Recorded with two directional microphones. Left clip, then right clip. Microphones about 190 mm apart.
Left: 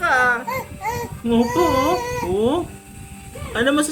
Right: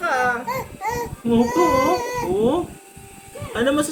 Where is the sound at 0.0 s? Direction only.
5° right (ahead or behind).